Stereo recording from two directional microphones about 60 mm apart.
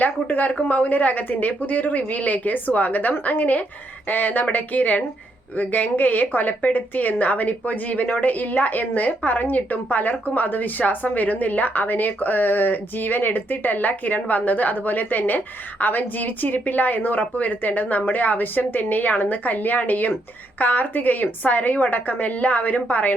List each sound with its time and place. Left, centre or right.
0.0 s a woman's voice: left